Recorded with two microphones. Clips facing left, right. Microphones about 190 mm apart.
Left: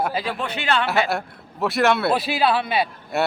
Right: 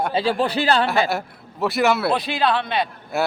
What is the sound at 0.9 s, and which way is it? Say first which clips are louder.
A man's voice: right 1 dB; centre (ahead or behind).